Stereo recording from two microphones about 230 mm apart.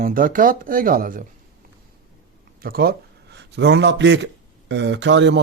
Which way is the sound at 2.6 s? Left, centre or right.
Right.